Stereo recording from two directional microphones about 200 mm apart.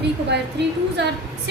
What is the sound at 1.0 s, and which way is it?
Speech, 60° right (ahead or behind).